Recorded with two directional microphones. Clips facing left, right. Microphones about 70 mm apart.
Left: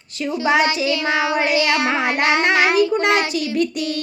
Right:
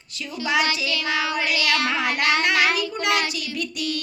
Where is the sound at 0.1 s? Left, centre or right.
Left.